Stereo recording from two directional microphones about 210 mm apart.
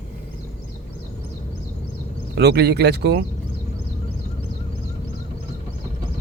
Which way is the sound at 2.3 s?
50° right (ahead or behind).